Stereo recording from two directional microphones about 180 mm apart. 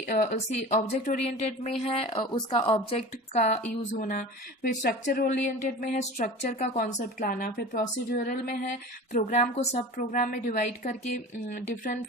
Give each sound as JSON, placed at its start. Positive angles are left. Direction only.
{"t": 0.0, "sound": "speech", "side_deg": 45}
{"t": 9.1, "sound": "speech", "side_deg": 40}